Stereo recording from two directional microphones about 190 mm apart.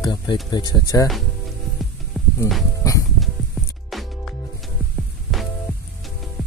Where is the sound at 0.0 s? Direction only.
25° left (ahead or behind).